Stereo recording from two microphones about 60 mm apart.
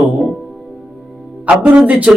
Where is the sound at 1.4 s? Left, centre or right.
Right.